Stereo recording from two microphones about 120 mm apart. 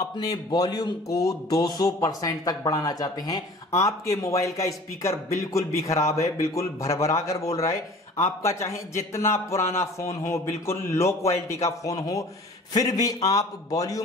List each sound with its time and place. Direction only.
0.0 s speech: 30° left (ahead or behind)